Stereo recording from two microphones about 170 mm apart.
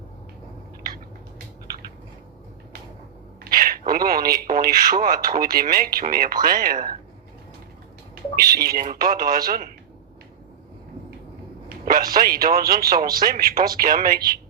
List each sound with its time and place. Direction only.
3.4 s speech: 60° right (ahead or behind)
8.1 s speech: 60° right (ahead or behind)
11.9 s speech: 60° right (ahead or behind)